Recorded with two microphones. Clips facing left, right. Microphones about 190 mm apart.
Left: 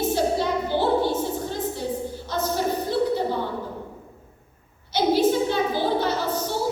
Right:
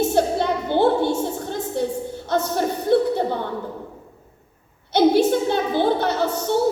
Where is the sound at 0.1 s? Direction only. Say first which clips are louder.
Right 3 dB; 55° right (ahead or behind).